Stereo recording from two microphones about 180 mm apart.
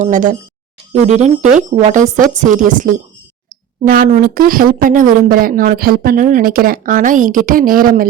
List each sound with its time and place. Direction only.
0.0 s speech: 45° right (ahead or behind)